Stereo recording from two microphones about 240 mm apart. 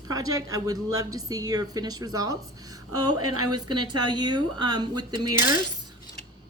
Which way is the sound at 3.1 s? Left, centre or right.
Right.